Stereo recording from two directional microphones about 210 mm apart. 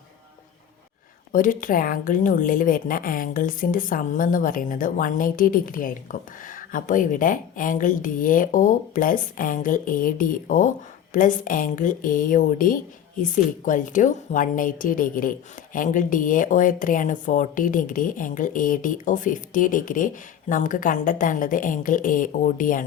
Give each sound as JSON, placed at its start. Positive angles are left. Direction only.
{"t": 1.3, "sound": "speech", "side_deg": 40}